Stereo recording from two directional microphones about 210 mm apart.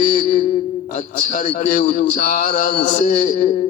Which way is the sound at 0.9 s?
40° left (ahead or behind).